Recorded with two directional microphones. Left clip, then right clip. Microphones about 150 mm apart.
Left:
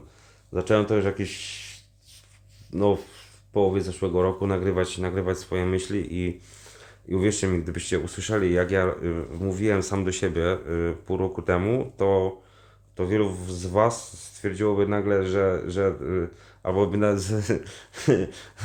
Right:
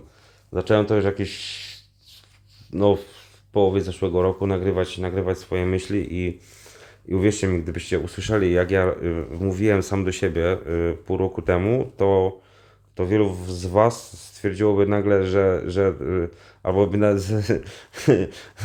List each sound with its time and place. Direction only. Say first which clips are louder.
0.5 s speech: right 3 dB; 25° right (ahead or behind)
2.7 s speech: right 4 dB; 25° right (ahead or behind)